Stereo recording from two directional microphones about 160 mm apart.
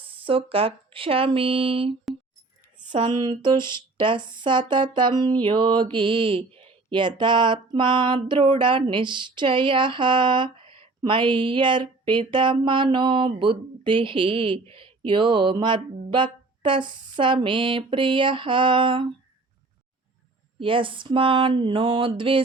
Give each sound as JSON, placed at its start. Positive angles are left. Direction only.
{"t": 0.3, "sound": "music", "side_deg": -35}
{"t": 3.0, "sound": "a sound", "side_deg": -25}
{"t": 3.9, "sound": "music", "side_deg": -30}
{"t": 16.0, "sound": "speech", "side_deg": -30}
{"t": 17.2, "sound": "music", "side_deg": -30}
{"t": 20.6, "sound": "music", "side_deg": -30}